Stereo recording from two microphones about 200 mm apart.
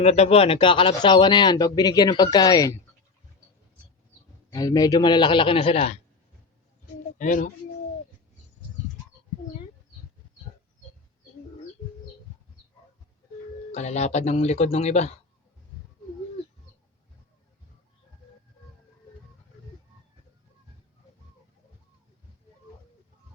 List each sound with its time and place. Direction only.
0.0 s speech: 30° left (ahead or behind)
4.5 s speech: 20° left (ahead or behind)
7.2 s speech: 40° left (ahead or behind)
13.7 s speech: 35° left (ahead or behind)